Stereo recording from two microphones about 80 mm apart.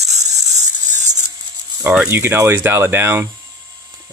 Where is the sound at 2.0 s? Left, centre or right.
Right.